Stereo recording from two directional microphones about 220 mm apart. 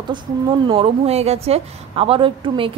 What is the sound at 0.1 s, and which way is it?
Speech, 20° right (ahead or behind).